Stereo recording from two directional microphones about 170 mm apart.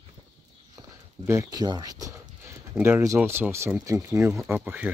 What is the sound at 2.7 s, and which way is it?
Speech, 10° right (ahead or behind).